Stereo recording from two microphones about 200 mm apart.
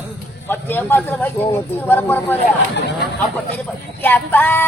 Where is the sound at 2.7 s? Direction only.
60° left (ahead or behind).